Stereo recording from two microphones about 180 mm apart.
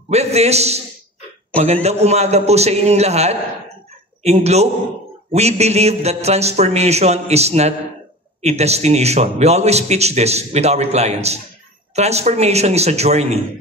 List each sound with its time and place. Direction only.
0.1 s a man's voice: 35° right (ahead or behind)